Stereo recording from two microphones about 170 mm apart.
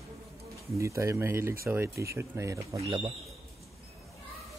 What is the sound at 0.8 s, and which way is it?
Speech, 15° right (ahead or behind).